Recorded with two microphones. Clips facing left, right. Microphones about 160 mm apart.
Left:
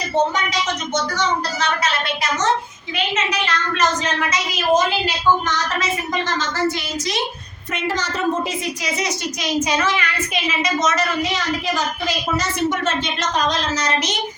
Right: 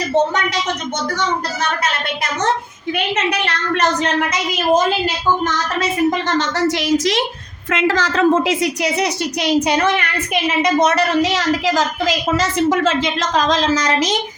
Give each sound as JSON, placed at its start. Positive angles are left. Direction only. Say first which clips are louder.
{"t": 2.9, "sound": "a woman's voice", "louder": "right 3 dB", "side_deg": -65}
{"t": 6.1, "sound": "a woman's voice", "louder": "right 5 dB", "side_deg": -65}